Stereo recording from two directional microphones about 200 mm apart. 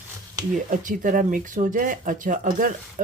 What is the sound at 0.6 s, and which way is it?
Speech, 40° right (ahead or behind).